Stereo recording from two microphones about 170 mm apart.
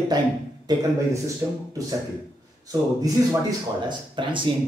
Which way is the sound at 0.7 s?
25° right (ahead or behind).